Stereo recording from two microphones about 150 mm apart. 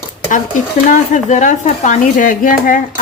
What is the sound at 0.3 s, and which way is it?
Speech, 55° left (ahead or behind).